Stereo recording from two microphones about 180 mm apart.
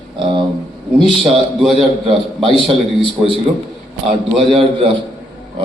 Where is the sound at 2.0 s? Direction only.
30° right (ahead or behind).